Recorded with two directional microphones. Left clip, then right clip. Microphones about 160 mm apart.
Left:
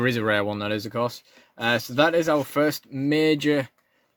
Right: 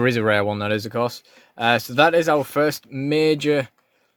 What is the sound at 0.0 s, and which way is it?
Speech, 30° right (ahead or behind).